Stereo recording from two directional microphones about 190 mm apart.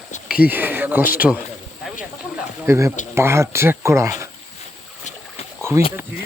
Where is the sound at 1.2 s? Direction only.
Centre (ahead or behind).